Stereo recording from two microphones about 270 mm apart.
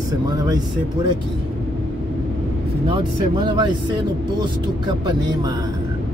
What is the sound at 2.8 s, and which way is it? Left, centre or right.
Speech, centre.